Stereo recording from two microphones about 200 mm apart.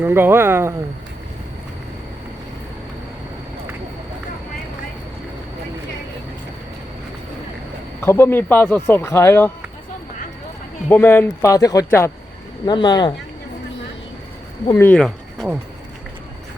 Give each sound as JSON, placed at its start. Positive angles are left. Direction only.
{"t": 0.0, "sound": "speech", "side_deg": -10}
{"t": 8.0, "sound": "speech", "side_deg": 10}
{"t": 10.8, "sound": "speech", "side_deg": 10}
{"t": 14.7, "sound": "speech", "side_deg": 10}